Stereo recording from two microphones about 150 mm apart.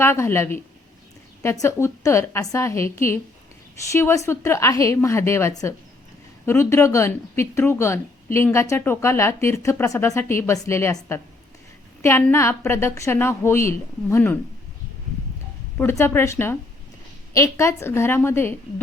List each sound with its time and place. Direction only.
0.0 s speech: 15° left (ahead or behind)
1.6 s a woman's voice: 20° left (ahead or behind)
15.8 s speech: 15° left (ahead or behind)